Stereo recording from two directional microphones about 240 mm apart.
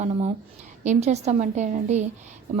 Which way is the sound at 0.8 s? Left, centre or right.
Right.